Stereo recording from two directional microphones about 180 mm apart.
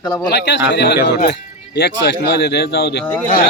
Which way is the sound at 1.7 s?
60° left (ahead or behind).